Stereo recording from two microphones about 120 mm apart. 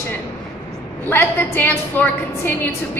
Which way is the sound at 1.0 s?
15° left (ahead or behind).